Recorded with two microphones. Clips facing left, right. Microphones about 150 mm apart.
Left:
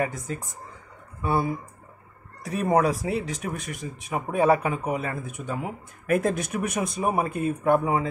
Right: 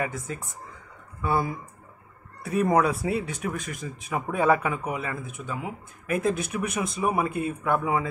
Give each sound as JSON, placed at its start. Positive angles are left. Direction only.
{"t": 1.2, "sound": "speech", "side_deg": 25}